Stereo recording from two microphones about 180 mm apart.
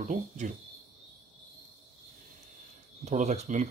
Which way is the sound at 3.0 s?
40° right (ahead or behind).